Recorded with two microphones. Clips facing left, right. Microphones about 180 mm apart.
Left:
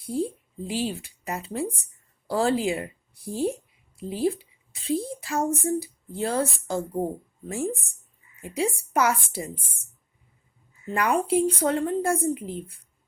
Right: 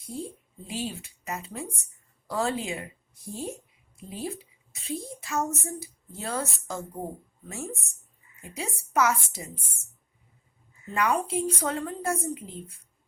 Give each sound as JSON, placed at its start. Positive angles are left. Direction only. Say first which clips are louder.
{"t": 0.0, "sound": "a woman's voice", "louder": "left 9 dB", "side_deg": 30}
{"t": 10.9, "sound": "a woman's voice", "louder": "left 4 dB", "side_deg": 30}